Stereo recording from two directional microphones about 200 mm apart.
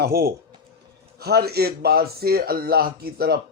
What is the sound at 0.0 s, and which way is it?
A man's voice, 50° right (ahead or behind).